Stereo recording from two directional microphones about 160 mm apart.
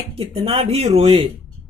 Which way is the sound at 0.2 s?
35° right (ahead or behind).